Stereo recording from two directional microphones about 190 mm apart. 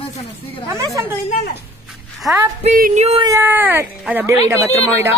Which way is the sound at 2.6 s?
40° right (ahead or behind).